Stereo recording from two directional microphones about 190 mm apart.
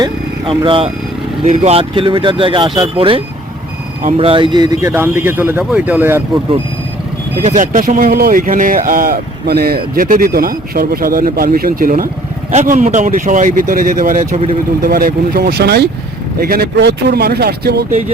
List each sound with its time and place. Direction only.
0.0 s speech: 25° right (ahead or behind); by 6.2 s 10° right (ahead or behind)
7.4 s speech: 45° right (ahead or behind)